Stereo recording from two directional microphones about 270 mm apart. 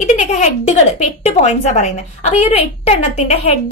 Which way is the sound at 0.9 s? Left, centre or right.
Left.